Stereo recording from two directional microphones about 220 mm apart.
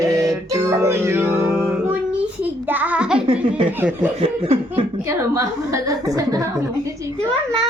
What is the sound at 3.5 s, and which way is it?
Speech, 5° right (ahead or behind).